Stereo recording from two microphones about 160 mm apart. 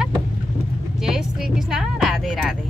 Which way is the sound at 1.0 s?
5° right (ahead or behind).